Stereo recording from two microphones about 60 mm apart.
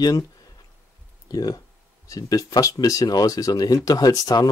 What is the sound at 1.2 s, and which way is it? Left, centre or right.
Speech, left.